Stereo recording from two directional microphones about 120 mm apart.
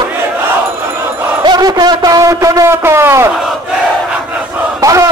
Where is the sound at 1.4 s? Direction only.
35° right (ahead or behind).